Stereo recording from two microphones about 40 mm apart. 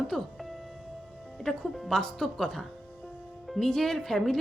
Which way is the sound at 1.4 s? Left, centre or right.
Centre.